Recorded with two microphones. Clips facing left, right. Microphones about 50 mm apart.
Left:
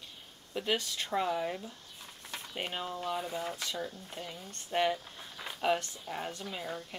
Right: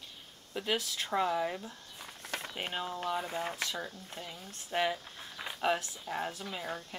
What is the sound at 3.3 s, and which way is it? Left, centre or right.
Speech, right.